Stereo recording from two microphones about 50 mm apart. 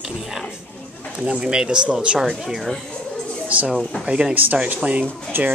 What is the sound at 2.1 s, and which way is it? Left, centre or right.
Speech, centre.